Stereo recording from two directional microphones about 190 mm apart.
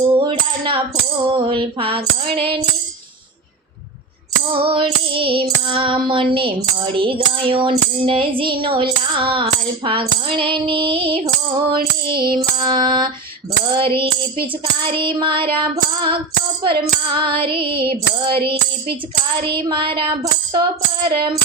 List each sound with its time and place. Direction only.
0.2 s coin: 25° right (ahead or behind)
1.3 s child singing: 25° right (ahead or behind)
4.5 s child singing: 30° right (ahead or behind)
19.5 s child singing: 25° right (ahead or behind)